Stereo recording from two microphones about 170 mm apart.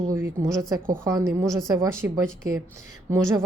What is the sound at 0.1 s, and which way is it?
A woman's voice, 15° right (ahead or behind).